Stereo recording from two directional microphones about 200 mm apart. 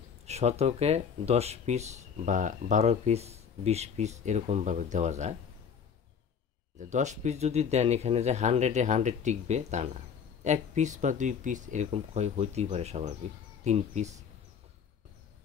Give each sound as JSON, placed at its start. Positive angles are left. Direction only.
{"t": 0.2, "sound": "speech", "side_deg": -35}
{"t": 6.8, "sound": "speech", "side_deg": -35}